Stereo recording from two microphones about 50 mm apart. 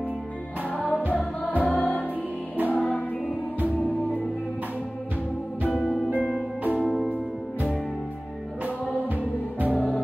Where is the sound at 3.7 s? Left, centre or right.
Left.